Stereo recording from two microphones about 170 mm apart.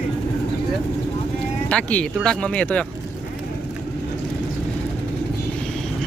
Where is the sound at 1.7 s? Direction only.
10° left (ahead or behind).